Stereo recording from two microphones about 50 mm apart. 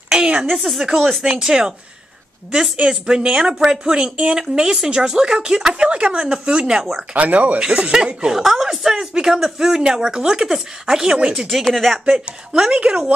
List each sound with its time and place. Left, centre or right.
0.1 s a sound: centre
0.5 s speech: centre
7.2 s speech: right
7.7 s speech: centre
8.4 s speech: centre
11.4 s speech: centre
12.5 s speech: centre